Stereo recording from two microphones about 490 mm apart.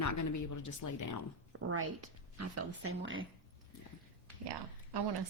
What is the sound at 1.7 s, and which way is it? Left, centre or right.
Speech, right.